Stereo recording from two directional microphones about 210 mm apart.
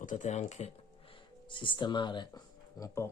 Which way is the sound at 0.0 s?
35° left (ahead or behind).